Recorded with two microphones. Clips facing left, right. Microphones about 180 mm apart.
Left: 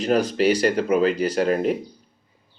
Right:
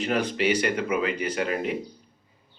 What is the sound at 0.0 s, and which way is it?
Speech, 40° left (ahead or behind).